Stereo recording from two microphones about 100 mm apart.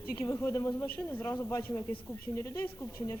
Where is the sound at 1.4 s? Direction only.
35° left (ahead or behind).